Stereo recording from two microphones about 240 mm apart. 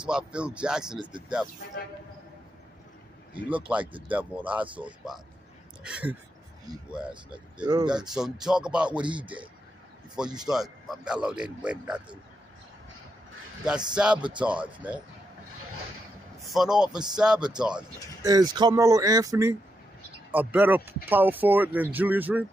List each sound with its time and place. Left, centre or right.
0.0 s speech: centre
3.4 s speech: centre
7.6 s speech: centre
7.9 s speech: centre
9.0 s a man's voice: centre
10.1 s speech: centre
13.7 s speech: centre
16.3 s speech: centre
18.2 s speech: centre